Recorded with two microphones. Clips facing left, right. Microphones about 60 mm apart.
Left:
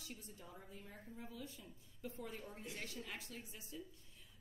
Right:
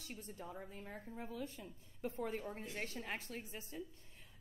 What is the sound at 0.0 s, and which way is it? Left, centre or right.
Speech, right.